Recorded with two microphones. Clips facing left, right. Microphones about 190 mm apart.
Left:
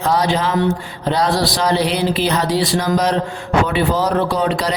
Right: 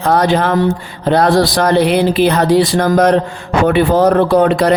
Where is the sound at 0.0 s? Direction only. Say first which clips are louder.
Right 5 dB; 55° right (ahead or behind).